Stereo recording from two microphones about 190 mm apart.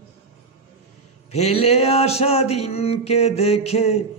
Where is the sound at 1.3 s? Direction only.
35° left (ahead or behind).